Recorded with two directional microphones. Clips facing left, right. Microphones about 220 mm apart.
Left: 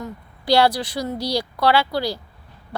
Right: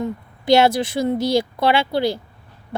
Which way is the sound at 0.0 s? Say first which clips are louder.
Right 7 dB; 20° right (ahead or behind).